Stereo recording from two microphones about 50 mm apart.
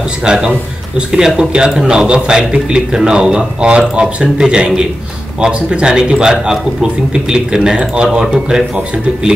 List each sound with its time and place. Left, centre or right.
0.2 s a man's voice: centre